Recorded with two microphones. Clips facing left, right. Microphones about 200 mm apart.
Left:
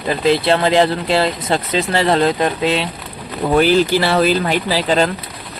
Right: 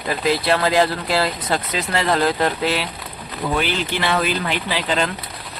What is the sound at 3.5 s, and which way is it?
Speech, 40° left (ahead or behind).